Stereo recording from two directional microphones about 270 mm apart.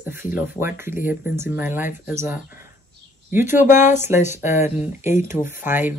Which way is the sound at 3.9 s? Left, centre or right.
Centre.